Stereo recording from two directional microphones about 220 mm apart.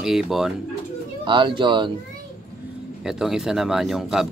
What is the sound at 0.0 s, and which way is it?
Speech, centre (ahead or behind).